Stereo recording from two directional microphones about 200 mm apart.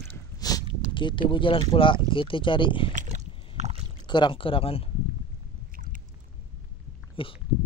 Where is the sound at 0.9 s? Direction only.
25° left (ahead or behind).